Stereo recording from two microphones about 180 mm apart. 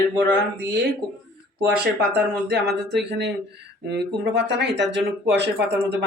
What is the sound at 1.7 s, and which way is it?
Speech, 65° right (ahead or behind).